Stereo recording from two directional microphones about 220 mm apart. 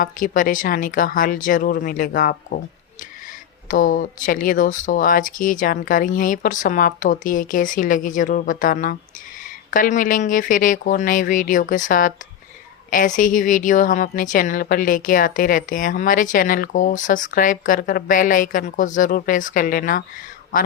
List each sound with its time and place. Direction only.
0.0 s a woman's voice: 40° left (ahead or behind)
3.7 s a woman's voice: 40° left (ahead or behind)